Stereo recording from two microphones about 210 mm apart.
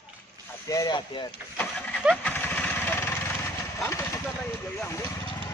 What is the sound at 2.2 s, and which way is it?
Vehicle, 10° left (ahead or behind).